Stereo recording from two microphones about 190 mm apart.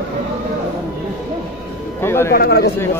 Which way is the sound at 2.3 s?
55° left (ahead or behind).